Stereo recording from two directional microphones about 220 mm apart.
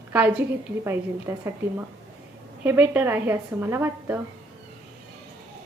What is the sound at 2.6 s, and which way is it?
A woman's voice, 10° right (ahead or behind).